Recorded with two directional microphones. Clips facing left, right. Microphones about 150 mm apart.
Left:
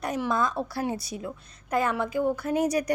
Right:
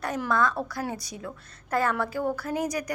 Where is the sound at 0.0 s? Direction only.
20° left (ahead or behind).